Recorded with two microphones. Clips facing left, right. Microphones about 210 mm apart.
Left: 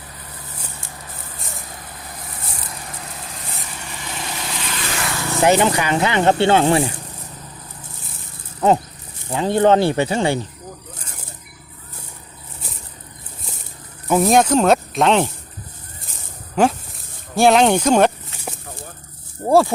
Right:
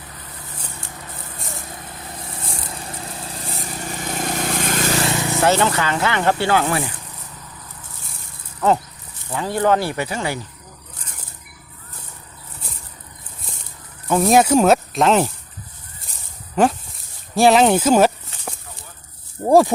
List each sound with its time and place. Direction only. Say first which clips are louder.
1.4 s vehicle: right 3 dB; centre (ahead or behind)
2.6 s vehicle: right 2 dB; 30° right (ahead or behind)
5.1 s vehicle: right 3 dB; 20° right (ahead or behind)
5.4 s speech: left 3 dB; 15° left (ahead or behind)
9.3 s speech: left 4 dB; 25° left (ahead or behind)
14.1 s speech: even; centre (ahead or behind)
16.6 s speech: even; centre (ahead or behind)
19.5 s speech: right 1 dB; 15° right (ahead or behind)